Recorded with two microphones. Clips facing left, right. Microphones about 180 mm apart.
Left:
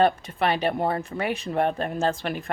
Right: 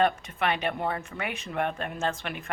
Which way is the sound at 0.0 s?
35° left (ahead or behind).